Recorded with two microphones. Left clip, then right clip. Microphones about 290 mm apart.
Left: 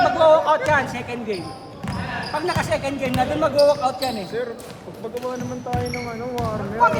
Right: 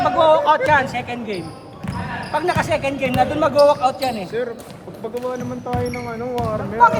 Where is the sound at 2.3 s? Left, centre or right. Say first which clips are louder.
Right 4 dB; right.